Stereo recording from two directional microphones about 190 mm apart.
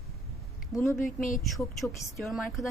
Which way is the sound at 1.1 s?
45° left (ahead or behind).